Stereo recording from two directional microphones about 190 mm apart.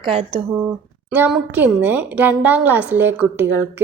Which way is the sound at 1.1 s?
10° right (ahead or behind).